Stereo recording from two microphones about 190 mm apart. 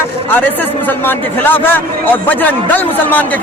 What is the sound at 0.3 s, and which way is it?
A man's voice, 10° left (ahead or behind).